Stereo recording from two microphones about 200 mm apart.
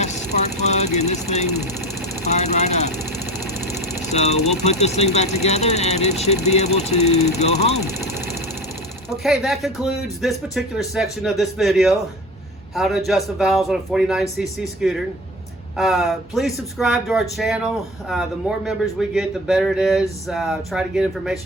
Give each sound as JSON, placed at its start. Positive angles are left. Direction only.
{"t": 0.0, "sound": "vehicle", "side_deg": 35}
{"t": 2.2, "sound": "speech", "side_deg": 35}
{"t": 4.1, "sound": "speech", "side_deg": 35}
{"t": 9.0, "sound": "speech", "side_deg": 0}